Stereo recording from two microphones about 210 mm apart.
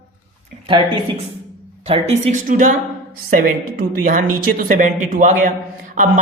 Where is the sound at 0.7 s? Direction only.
25° right (ahead or behind).